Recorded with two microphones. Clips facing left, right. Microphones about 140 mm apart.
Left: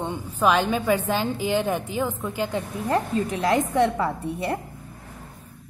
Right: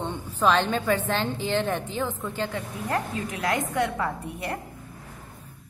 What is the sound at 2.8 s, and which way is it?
A woman's voice, 30° left (ahead or behind).